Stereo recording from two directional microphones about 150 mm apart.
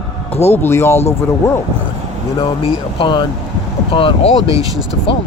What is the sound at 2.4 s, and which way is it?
Speech, 35° left (ahead or behind).